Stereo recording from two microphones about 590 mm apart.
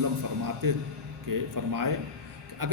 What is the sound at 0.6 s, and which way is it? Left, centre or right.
A man's voice, right.